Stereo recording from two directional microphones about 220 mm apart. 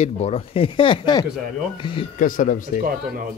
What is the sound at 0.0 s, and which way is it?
Speech, 25° left (ahead or behind).